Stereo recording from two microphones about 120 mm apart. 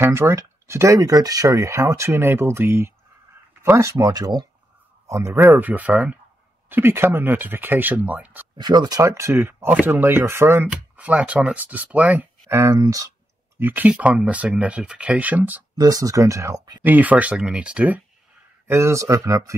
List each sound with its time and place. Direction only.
0.0 s speech: 20° right (ahead or behind)
8.5 s speech: 35° right (ahead or behind)
13.6 s speech: 15° right (ahead or behind)
15.8 s speech: 30° right (ahead or behind)
16.8 s speech: 15° right (ahead or behind)
18.7 s speech: 25° right (ahead or behind)